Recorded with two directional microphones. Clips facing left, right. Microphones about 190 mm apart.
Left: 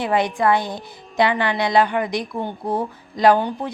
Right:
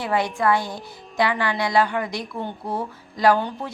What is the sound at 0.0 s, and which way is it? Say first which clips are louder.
A woman's voice: left 3 dB; 20° left (ahead or behind).